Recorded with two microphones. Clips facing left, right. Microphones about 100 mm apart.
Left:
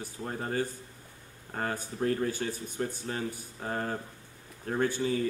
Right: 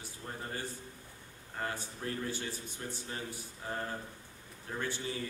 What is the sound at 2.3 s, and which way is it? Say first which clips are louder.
Speech: left 6 dB; 45° left (ahead or behind).